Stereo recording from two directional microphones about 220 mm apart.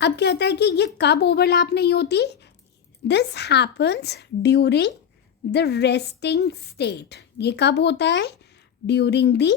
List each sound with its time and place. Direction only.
0.0 s a woman's voice: 50° left (ahead or behind)